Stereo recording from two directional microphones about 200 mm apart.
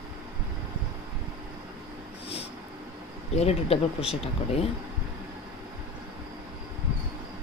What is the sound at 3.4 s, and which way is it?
Speech, 30° left (ahead or behind).